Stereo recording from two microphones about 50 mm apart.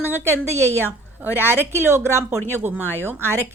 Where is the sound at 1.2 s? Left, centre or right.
Right.